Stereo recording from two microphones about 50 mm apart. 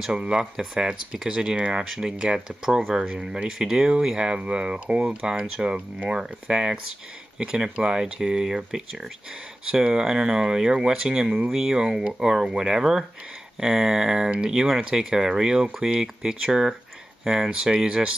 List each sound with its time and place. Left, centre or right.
0.1 s speech: centre